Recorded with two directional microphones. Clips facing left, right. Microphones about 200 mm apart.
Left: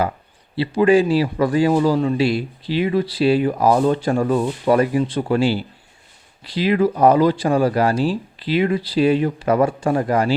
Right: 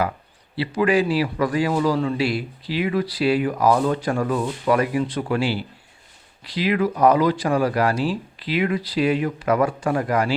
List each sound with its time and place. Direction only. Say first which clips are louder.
0.5 s a man's voice: left 5 dB; 30° left (ahead or behind)